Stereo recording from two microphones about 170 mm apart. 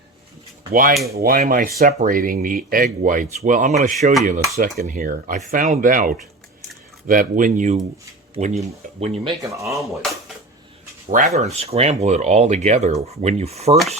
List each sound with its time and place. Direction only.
0.7 s speech: 55° right (ahead or behind); by 9.3 s 40° right (ahead or behind)
9.4 s speech: 15° right (ahead or behind)
9.7 s speech: centre (ahead or behind)
11.1 s speech: 45° right (ahead or behind)